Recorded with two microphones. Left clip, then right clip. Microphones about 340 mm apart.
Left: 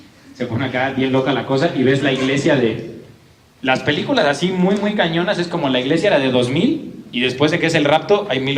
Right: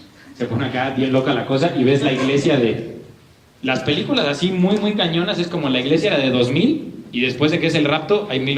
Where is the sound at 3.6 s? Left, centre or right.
Left.